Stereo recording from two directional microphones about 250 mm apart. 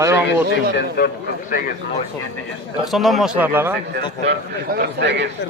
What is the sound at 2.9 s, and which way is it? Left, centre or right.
Speech, centre.